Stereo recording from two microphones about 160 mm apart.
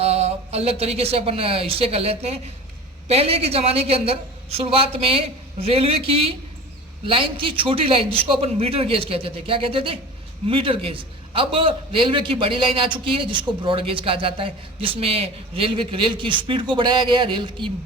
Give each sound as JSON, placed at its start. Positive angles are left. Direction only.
{"t": 0.0, "sound": "a man's voice", "side_deg": -40}